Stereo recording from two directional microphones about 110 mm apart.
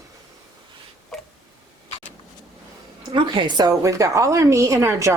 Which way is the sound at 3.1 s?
45° right (ahead or behind).